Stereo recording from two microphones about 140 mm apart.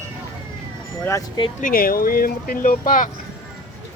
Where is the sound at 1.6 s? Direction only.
85° left.